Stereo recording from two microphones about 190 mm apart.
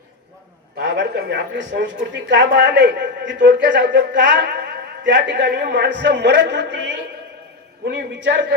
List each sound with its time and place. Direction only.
0.8 s a man's voice: 65° right (ahead or behind)